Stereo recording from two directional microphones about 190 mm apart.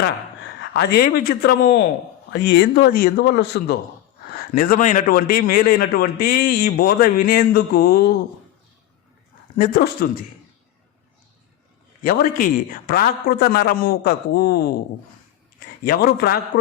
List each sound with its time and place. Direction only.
0.6 s speech: 65° left (ahead or behind)
4.4 s a man's voice: 50° left (ahead or behind)
9.6 s a man's voice: 50° left (ahead or behind)
12.0 s a man's voice: 45° left (ahead or behind)
15.8 s a man's voice: 50° left (ahead or behind)